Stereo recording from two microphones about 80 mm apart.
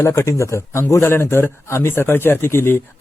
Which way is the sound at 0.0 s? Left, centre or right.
Left.